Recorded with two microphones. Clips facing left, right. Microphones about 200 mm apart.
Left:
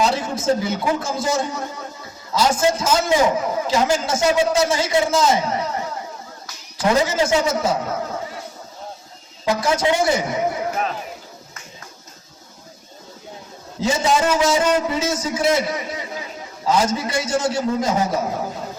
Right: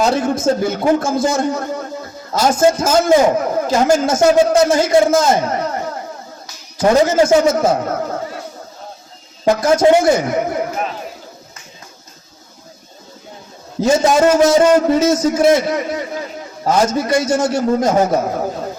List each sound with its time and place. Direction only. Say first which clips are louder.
0.0 s a man's voice: right 5 dB; 50° right (ahead or behind)
6.7 s a man's voice: right 6 dB; 45° right (ahead or behind)
9.4 s a man's voice: right 7 dB; 45° right (ahead or behind)
13.8 s a man's voice: right 7 dB; 45° right (ahead or behind)